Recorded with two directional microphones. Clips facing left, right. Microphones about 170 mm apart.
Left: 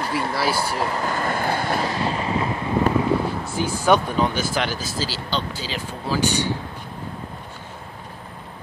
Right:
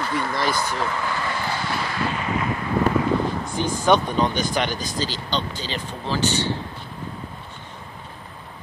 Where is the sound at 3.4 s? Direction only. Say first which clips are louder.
Even; 5° left (ahead or behind).